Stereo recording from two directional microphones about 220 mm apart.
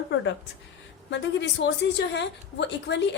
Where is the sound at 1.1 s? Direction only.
55° left (ahead or behind).